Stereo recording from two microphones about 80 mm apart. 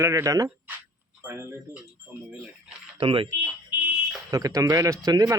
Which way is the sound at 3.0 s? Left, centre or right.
Right.